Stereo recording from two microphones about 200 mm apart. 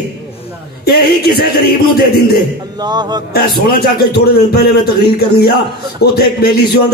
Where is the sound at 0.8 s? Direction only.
50° left (ahead or behind).